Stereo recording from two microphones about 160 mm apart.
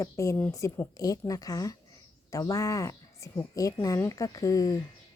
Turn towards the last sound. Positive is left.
turn(degrees=20)  # may be behind; listen again after turning